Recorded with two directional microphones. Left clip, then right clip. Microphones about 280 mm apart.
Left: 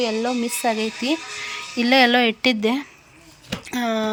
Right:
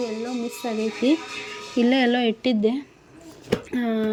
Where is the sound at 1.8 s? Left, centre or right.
Centre.